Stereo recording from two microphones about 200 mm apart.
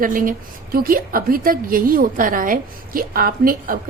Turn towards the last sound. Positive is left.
turn(degrees=-45)  # may be behind; listen again after turning